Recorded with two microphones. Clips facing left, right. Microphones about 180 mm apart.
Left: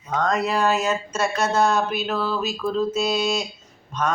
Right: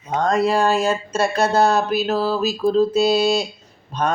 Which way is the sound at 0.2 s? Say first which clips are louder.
Right 4 dB; 30° right (ahead or behind).